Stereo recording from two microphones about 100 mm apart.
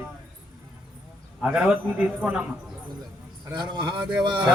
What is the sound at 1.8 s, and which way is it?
Speech, 10° right (ahead or behind).